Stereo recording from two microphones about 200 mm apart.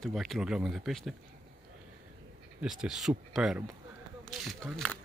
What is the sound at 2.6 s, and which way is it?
Speech, centre (ahead or behind).